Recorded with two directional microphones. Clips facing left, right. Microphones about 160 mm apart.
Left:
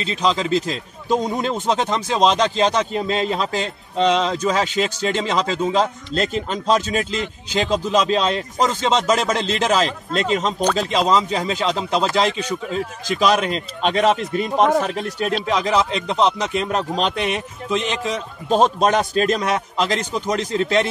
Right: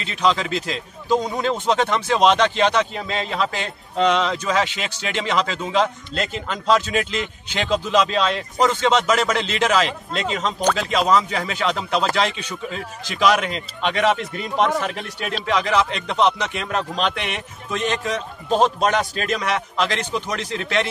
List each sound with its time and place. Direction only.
0.0 s a man's voice: 35° left (ahead or behind)
17.6 s a man's voice: 25° left (ahead or behind)